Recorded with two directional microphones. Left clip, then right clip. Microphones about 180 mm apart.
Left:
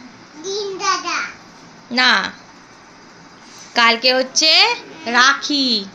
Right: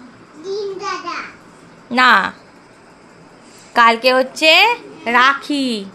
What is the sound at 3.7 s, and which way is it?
A woman's voice, 10° right (ahead or behind).